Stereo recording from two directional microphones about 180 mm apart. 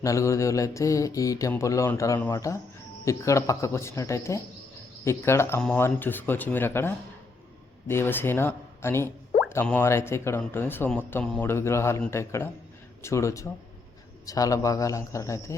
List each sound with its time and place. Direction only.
0.0 s speech: 15° left (ahead or behind)